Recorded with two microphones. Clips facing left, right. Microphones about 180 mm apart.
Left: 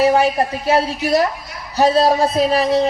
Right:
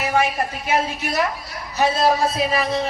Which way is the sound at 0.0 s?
35° left (ahead or behind).